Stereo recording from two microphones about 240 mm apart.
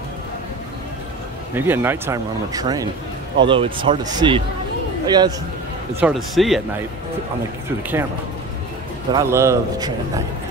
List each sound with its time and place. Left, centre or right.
1.5 s a man's voice: centre
5.9 s speech: centre
9.1 s a man's voice: centre